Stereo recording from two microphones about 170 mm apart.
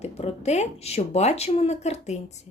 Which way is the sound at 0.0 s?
40° left (ahead or behind).